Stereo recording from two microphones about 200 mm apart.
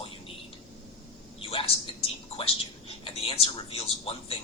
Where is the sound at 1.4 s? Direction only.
30° left (ahead or behind).